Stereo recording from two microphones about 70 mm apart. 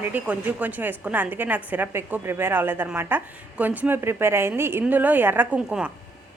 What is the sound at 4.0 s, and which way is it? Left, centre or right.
Speech, right.